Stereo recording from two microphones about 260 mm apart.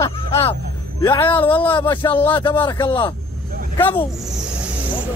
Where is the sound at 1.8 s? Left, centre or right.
Centre.